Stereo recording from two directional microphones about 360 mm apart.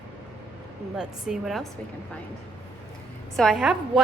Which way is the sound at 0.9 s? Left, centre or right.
Centre.